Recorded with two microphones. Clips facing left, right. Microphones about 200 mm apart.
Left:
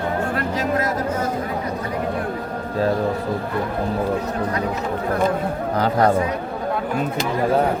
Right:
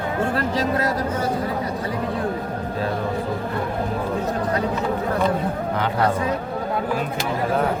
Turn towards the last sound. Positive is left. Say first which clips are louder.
# left 4 dB
turn(degrees=40)  # may be behind; listen again after turning